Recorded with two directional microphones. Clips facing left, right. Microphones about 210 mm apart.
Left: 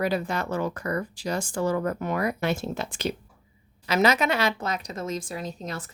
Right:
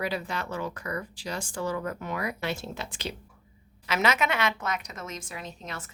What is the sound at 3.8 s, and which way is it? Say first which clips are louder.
A woman's voice: left 4 dB; 35° left (ahead or behind).